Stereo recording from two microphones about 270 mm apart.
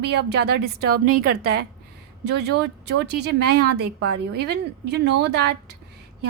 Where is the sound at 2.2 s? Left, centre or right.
Right.